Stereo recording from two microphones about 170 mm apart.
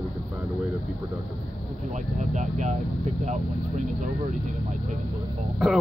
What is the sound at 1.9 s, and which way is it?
Speech, 45° right (ahead or behind).